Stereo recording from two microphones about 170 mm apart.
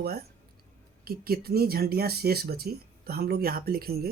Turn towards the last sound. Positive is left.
turn(degrees=-65)  # may be behind; listen again after turning